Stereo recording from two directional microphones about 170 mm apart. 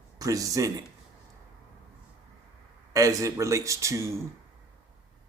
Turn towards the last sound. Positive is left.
turn(degrees=-15)  # may be behind; listen again after turning